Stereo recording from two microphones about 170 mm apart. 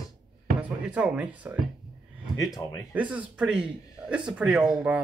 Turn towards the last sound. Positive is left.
turn(degrees=-5)  # may be behind; listen again after turning